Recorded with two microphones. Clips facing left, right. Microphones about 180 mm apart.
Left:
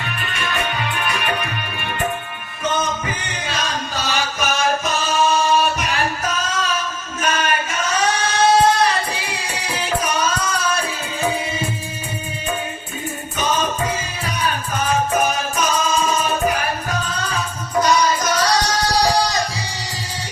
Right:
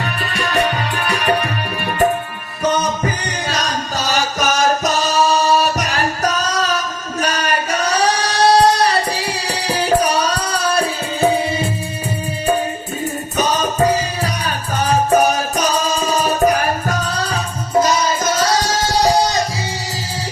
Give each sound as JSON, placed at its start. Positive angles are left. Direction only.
{"t": 0.0, "sound": "music", "side_deg": -35}
{"t": 2.6, "sound": "music", "side_deg": -40}
{"t": 7.2, "sound": "singing", "side_deg": -40}
{"t": 13.3, "sound": "music", "side_deg": -40}
{"t": 17.7, "sound": "music", "side_deg": -25}